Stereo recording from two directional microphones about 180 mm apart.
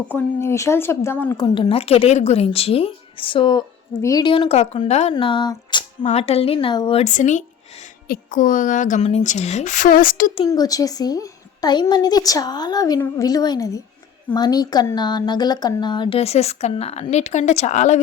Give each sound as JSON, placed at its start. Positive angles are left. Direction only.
{"t": 0.1, "sound": "a woman's voice", "side_deg": 10}
{"t": 1.4, "sound": "speech", "side_deg": 25}
{"t": 5.1, "sound": "speech", "side_deg": 25}
{"t": 7.0, "sound": "a woman's voice", "side_deg": 45}
{"t": 10.3, "sound": "a woman's voice", "side_deg": 20}